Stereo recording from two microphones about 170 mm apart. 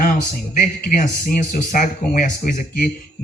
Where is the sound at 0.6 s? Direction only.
45° left (ahead or behind).